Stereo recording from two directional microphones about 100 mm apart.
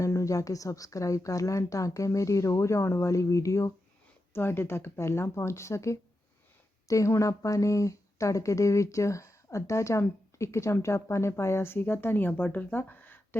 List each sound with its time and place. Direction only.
0.0 s speech: 30° left (ahead or behind)